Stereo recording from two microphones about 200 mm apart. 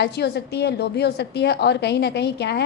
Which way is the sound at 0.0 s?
55° left (ahead or behind).